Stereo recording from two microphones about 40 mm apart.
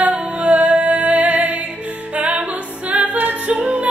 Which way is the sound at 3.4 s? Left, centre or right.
Right.